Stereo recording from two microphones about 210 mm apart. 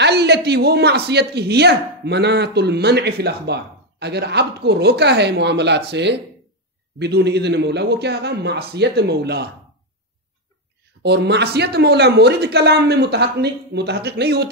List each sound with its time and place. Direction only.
0.0 s a man's voice: 50° right (ahead or behind)
11.0 s a man's voice: 55° right (ahead or behind)